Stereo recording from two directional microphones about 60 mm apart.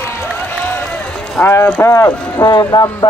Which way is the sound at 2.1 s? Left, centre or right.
Left.